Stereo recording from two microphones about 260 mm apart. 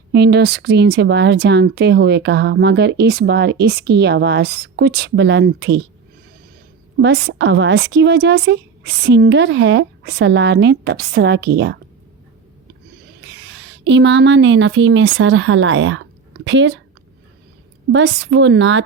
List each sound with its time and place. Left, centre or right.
0.1 s speech: right
7.0 s speech: right
13.5 s a woman's voice: right
17.9 s a woman's voice: right